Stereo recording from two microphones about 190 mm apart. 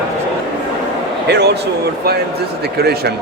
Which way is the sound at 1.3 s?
60° right (ahead or behind).